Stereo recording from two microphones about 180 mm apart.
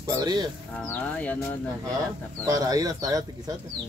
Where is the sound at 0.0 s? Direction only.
20° right (ahead or behind).